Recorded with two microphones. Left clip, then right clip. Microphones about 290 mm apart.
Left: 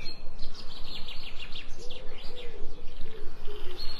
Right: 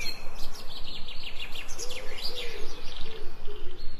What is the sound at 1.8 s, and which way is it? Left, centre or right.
Chirp, right.